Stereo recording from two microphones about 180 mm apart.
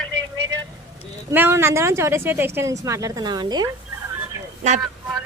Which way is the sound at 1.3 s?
10° right (ahead or behind).